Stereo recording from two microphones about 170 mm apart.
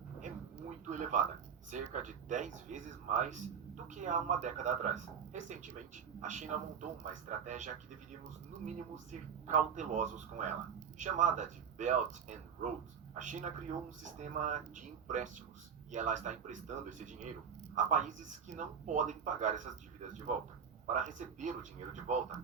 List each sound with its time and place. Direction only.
0.9 s a sound: 45° right (ahead or behind)
1.7 s speech: 45° right (ahead or behind)
9.5 s speech: 45° right (ahead or behind)